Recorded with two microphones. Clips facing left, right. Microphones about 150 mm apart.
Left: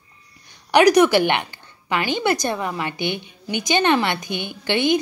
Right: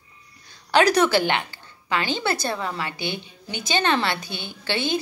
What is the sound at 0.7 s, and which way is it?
A woman's voice, 15° left (ahead or behind).